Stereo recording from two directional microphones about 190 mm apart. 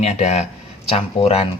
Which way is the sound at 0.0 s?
35° left (ahead or behind).